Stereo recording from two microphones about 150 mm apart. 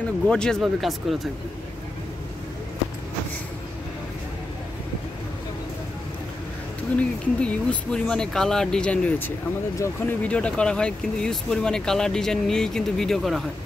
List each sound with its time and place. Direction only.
0.3 s speech: 5° left (ahead or behind)
7.0 s speech: 5° left (ahead or behind)